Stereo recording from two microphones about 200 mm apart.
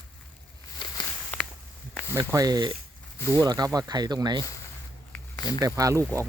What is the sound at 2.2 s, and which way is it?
Speech, 20° right (ahead or behind).